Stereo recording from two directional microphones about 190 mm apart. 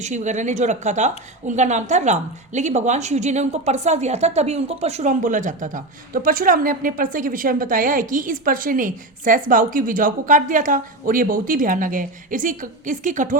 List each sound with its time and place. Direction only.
0.0 s a woman's voice: 40° right (ahead or behind)